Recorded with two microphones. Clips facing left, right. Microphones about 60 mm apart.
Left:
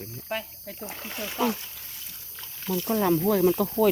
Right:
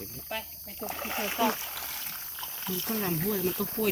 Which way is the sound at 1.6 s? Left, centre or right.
Right.